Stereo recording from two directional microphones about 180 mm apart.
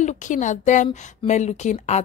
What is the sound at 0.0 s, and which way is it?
A woman's voice, 40° left (ahead or behind).